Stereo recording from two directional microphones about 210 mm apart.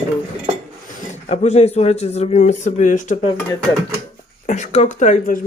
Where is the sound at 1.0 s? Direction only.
30° left (ahead or behind).